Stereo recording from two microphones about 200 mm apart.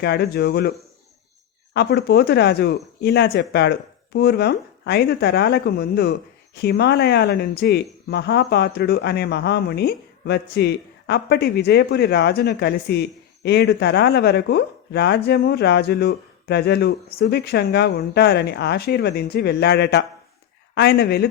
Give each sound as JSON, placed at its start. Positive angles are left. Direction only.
{"t": 0.0, "sound": "speech", "side_deg": 55}